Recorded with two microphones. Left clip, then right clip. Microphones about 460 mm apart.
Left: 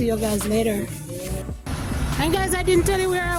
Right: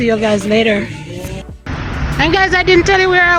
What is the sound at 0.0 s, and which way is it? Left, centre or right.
Speech, left.